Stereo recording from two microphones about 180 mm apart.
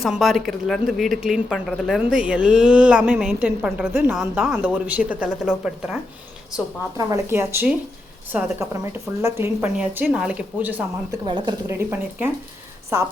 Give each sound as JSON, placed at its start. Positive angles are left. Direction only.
{"t": 0.0, "sound": "a woman's voice", "side_deg": 0}
{"t": 6.9, "sound": "a woman's voice", "side_deg": -20}
{"t": 11.3, "sound": "a woman's voice", "side_deg": -25}
{"t": 11.8, "sound": "a woman's voice", "side_deg": -10}